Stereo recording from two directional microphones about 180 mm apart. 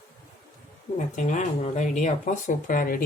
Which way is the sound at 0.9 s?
45° left (ahead or behind).